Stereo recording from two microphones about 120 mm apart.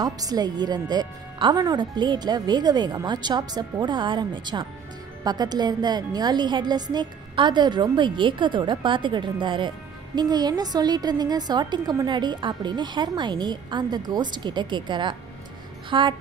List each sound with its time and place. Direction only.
0.0 s a woman's voice: 35° right (ahead or behind)
15.9 s music: 45° right (ahead or behind)